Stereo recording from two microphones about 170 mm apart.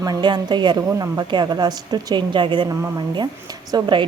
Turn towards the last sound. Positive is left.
turn(degrees=-25)  # may be behind; listen again after turning